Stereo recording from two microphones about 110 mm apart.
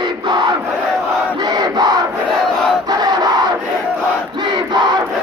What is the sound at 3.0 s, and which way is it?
Battle cry, 35° right (ahead or behind).